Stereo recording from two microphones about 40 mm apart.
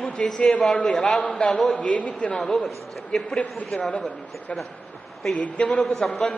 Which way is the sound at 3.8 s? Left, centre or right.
Left.